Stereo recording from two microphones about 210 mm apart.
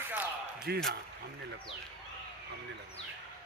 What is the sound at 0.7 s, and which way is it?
Speech, 50° right (ahead or behind).